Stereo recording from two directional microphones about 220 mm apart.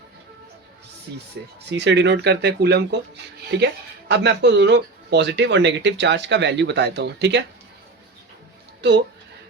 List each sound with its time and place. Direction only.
1.4 s speech: 50° right (ahead or behind)